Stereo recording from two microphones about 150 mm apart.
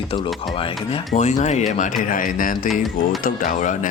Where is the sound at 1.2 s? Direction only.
50° left (ahead or behind).